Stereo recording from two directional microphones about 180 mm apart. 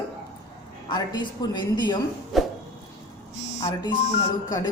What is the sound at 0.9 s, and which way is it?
A woman's voice, 20° left (ahead or behind).